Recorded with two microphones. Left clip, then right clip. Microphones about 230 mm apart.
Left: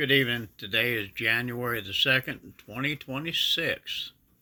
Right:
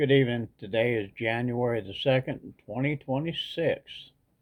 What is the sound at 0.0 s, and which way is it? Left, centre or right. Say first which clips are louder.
Speech: even; centre.